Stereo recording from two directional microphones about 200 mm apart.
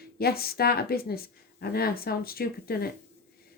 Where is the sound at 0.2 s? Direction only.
50° left (ahead or behind).